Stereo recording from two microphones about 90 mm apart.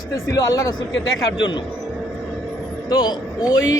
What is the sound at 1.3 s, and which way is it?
Speech, 60° left (ahead or behind).